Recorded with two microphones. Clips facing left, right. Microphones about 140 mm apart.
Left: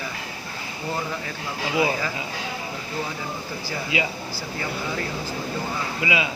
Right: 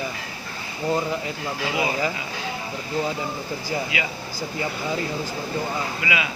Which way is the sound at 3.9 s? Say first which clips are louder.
Left 3 dB; 30° left (ahead or behind).